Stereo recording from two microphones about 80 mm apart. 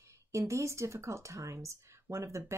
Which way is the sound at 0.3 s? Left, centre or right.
Right.